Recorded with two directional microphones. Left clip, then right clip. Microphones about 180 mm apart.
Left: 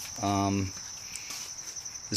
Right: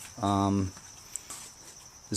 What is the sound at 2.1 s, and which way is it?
Cricket, 20° right (ahead or behind).